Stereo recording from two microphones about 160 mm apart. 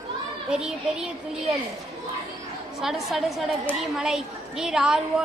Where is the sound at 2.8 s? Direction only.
Centre (ahead or behind).